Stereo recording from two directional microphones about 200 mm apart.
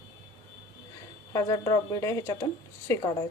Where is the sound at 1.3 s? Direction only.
20° left (ahead or behind).